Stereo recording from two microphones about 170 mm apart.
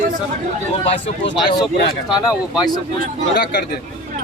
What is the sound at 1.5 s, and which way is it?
Speech, 25° left (ahead or behind).